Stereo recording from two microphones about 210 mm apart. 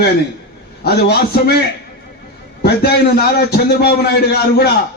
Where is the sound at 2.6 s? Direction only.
50° left (ahead or behind).